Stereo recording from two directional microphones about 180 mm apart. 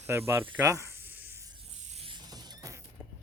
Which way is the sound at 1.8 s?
40° right (ahead or behind).